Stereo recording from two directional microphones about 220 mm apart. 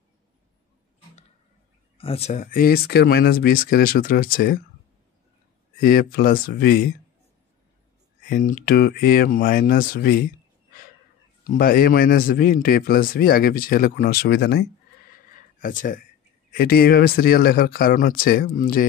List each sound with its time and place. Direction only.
2.0 s a man's voice: 25° left (ahead or behind)
5.8 s a man's voice: 40° left (ahead or behind)
8.3 s a man's voice: 40° left (ahead or behind)
11.4 s a man's voice: 40° left (ahead or behind)
15.2 s a sound: 35° left (ahead or behind)
16.5 s a man's voice: 45° left (ahead or behind)